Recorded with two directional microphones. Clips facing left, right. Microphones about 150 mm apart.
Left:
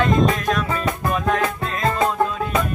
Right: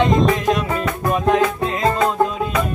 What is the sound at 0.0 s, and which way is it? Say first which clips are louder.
Music: right 2 dB; 20° right (ahead or behind).